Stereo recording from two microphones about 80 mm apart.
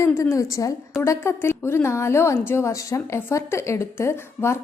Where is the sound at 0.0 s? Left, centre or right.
Left.